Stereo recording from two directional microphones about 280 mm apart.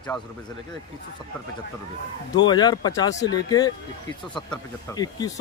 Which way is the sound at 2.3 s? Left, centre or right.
Centre.